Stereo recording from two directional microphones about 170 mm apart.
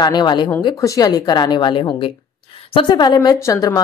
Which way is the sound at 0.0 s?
25° left (ahead or behind).